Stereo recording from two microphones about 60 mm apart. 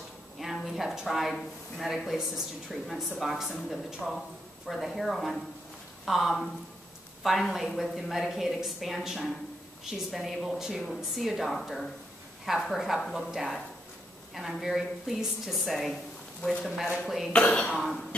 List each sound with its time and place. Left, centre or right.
0.7 s a woman's voice: centre
17.3 s speech: centre
17.7 s a woman's voice: centre